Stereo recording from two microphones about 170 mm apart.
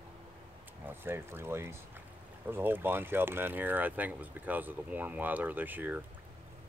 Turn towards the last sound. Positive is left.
turn(degrees=-10)  # may be behind; listen again after turning